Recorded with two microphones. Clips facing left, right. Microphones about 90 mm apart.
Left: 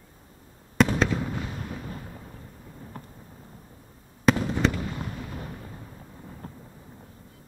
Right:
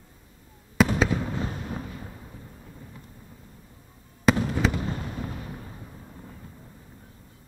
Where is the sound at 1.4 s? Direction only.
40° right (ahead or behind).